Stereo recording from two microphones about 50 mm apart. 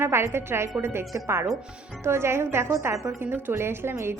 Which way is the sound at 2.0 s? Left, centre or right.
Right.